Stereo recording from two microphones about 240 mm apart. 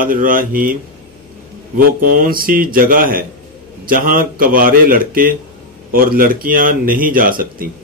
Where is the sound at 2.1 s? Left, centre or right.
Right.